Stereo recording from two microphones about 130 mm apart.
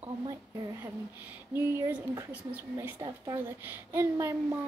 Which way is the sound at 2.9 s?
40° right (ahead or behind).